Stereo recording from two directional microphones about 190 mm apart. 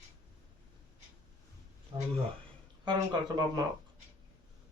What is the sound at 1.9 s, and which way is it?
Speech, 30° right (ahead or behind).